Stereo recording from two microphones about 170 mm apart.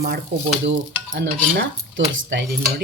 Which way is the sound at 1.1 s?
70° right (ahead or behind).